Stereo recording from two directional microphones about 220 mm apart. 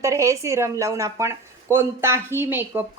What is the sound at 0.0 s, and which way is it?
Speech, 15° right (ahead or behind).